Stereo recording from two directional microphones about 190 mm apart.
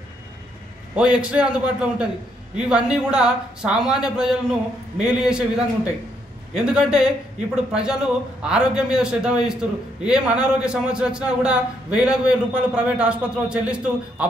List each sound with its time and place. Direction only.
0.9 s a man's voice: 5° right (ahead or behind)
6.5 s a man's voice: 5° right (ahead or behind)